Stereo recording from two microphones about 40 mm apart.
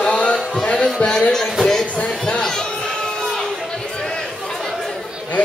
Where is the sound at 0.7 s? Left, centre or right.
Centre.